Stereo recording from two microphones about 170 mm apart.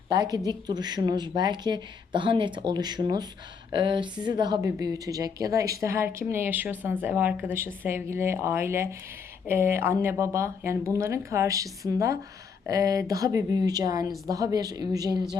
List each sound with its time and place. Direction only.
0.1 s a woman's voice: 20° right (ahead or behind)